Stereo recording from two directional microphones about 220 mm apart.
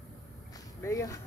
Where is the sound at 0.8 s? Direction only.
15° left (ahead or behind).